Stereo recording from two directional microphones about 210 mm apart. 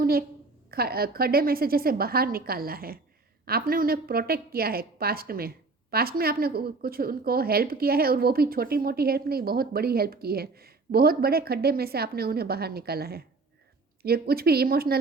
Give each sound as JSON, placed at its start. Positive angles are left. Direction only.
{"t": 0.0, "sound": "a woman's voice", "side_deg": -45}